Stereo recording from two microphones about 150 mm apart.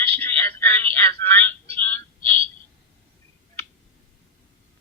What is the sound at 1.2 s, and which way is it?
Telephone, 15° left (ahead or behind).